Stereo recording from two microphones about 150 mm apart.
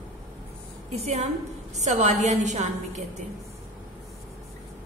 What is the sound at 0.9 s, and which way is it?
A woman's voice, 45° right (ahead or behind).